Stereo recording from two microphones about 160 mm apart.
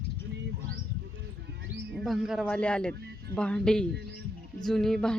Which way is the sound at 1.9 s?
Centre (ahead or behind).